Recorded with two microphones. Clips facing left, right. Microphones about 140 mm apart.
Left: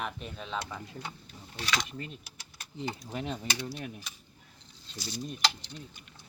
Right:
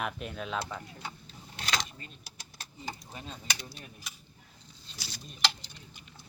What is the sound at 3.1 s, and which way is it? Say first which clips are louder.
Speech: left 6 dB; 75° left (ahead or behind).